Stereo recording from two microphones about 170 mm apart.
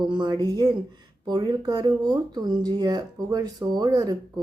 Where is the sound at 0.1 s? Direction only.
25° right (ahead or behind).